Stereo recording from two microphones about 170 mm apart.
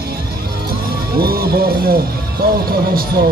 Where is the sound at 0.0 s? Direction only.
65° right (ahead or behind).